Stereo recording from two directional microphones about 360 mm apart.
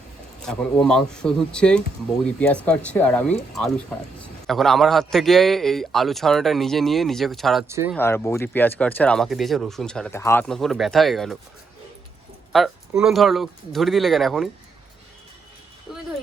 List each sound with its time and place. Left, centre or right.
0.4 s a man's voice: centre
7.9 s a man's voice: centre
12.5 s a man's voice: centre